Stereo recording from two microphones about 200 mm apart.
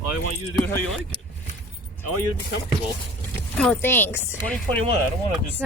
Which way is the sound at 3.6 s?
5° left (ahead or behind).